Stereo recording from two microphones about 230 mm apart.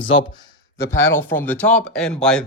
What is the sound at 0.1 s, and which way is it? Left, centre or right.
Speech, left.